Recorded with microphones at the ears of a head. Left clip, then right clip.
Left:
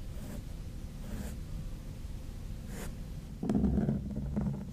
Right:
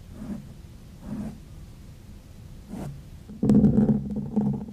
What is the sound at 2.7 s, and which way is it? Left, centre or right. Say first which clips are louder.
Stomach rumble: right 7 dB; right.